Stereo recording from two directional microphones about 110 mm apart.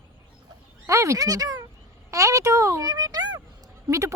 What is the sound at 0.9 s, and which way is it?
A child's voice, 25° right (ahead or behind).